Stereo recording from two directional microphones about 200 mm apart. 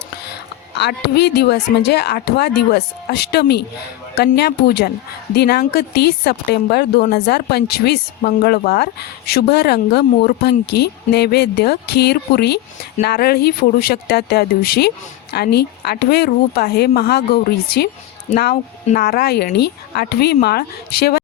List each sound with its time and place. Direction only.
0.7 s a woman's voice: 55° left (ahead or behind)
18.3 s speech: 35° left (ahead or behind)
18.9 s speech: 50° left (ahead or behind)